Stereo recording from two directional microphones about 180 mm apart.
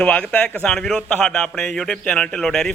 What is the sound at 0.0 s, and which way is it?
A man's voice, 5° left (ahead or behind).